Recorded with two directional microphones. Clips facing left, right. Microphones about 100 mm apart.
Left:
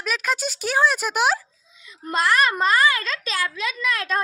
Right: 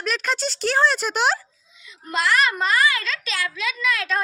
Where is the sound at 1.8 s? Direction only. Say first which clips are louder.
Left 1 dB; 40° left (ahead or behind).